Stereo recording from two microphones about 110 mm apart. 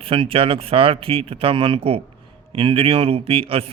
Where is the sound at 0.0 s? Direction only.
55° right (ahead or behind).